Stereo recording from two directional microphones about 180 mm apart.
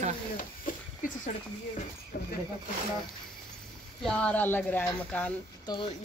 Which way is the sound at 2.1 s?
55° left (ahead or behind).